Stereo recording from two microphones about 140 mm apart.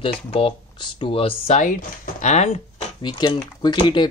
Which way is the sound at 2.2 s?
55° left (ahead or behind).